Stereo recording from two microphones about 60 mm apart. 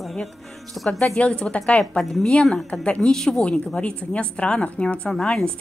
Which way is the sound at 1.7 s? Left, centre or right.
Centre.